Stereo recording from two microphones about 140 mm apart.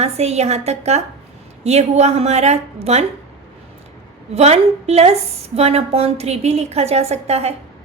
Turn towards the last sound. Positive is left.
turn(degrees=-50)  # may be behind; listen again after turning